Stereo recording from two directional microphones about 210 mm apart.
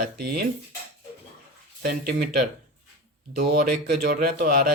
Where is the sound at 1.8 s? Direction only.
45° right (ahead or behind).